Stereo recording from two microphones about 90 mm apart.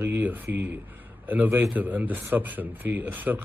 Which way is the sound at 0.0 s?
20° right (ahead or behind).